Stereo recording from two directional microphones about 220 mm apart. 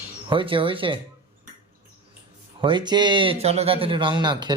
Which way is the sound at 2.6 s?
20° right (ahead or behind).